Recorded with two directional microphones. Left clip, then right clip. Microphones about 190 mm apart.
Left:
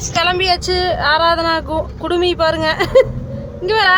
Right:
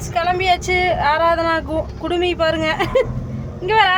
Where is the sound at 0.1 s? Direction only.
10° left (ahead or behind).